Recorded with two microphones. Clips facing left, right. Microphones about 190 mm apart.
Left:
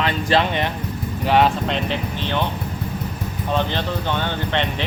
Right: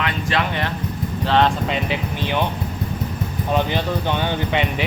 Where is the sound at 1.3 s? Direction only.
10° left (ahead or behind).